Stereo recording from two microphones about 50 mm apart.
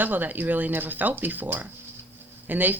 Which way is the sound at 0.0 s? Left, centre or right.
Right.